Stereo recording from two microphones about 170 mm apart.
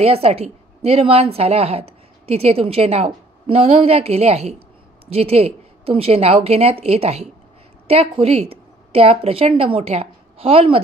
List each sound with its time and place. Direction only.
0.0 s a woman's voice: 35° right (ahead or behind)